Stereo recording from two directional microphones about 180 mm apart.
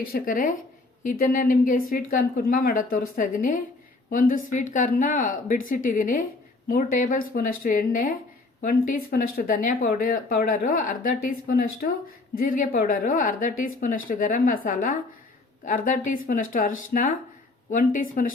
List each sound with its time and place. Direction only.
0.1 s speech: 50° left (ahead or behind)